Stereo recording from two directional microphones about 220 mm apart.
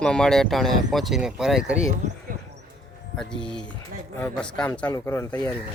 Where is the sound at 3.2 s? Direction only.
5° left (ahead or behind).